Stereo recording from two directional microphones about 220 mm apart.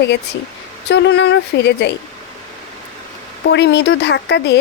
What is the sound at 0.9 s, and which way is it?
Speech, 50° left (ahead or behind).